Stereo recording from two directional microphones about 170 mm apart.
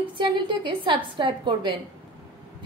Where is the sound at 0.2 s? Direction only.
30° right (ahead or behind).